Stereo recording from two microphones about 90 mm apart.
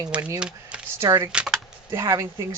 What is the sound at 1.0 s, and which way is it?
Speech, 40° right (ahead or behind).